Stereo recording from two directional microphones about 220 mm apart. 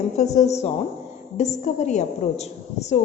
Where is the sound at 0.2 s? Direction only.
30° left (ahead or behind).